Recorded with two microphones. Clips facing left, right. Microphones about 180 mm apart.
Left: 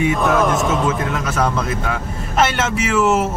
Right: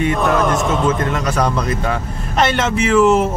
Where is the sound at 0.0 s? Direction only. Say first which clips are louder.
Even; centre (ahead or behind).